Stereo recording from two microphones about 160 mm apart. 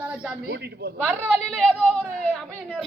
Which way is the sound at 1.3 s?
5° left (ahead or behind).